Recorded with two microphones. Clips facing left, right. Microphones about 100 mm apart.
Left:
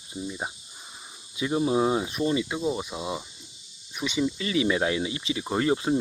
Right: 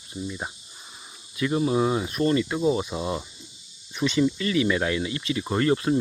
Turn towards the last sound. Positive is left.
turn(degrees=20)  # may be behind; listen again after turning